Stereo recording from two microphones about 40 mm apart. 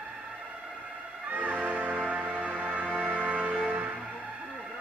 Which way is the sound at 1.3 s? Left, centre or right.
Right.